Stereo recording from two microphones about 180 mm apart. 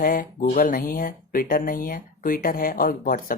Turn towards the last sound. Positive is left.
turn(degrees=50)  # may be behind; listen again after turning